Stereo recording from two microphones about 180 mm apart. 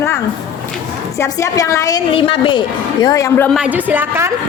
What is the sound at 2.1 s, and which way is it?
A woman's voice, 30° left (ahead or behind).